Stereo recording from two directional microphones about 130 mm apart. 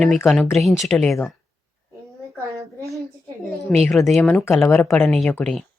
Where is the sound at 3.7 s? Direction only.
Centre (ahead or behind).